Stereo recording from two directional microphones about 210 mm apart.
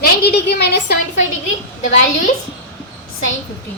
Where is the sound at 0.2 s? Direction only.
50° left (ahead or behind).